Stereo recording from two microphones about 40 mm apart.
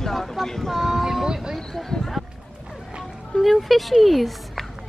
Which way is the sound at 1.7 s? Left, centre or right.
Centre.